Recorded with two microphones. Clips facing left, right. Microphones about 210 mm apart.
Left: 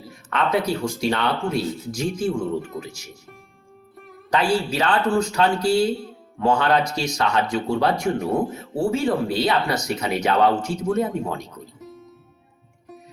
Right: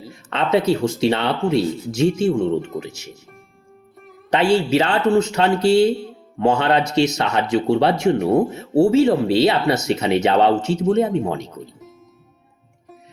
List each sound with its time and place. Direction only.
0.1 s speech: 25° right (ahead or behind)
4.3 s speech: 25° right (ahead or behind)